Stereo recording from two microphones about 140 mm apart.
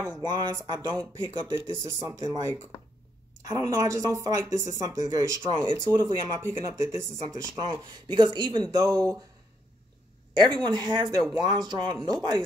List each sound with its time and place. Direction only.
0.2 s speech: 30° right (ahead or behind)
1.5 s speech: 20° right (ahead or behind)
10.3 s speech: 35° right (ahead or behind)